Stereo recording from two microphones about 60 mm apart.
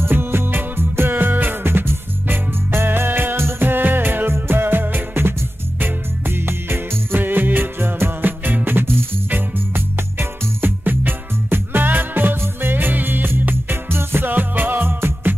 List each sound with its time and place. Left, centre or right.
0.0 s music: right